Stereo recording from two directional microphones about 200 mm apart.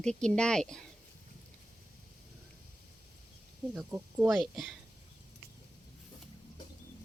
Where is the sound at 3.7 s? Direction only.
10° right (ahead or behind).